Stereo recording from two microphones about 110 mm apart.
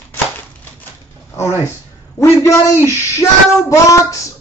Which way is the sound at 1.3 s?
25° left (ahead or behind).